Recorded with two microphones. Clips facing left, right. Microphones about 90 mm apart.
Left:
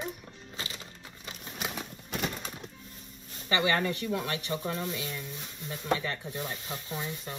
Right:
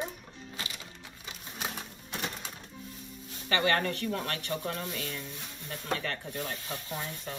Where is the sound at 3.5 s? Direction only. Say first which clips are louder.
Even; 15° left (ahead or behind).